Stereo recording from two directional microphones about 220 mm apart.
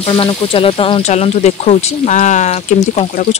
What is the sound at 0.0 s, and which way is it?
Speech, 25° left (ahead or behind).